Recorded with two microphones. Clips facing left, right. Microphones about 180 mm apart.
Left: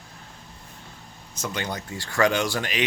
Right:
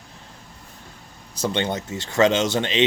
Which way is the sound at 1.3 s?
30° right (ahead or behind).